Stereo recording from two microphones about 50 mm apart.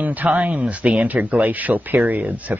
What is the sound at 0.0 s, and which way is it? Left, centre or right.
Speech, right.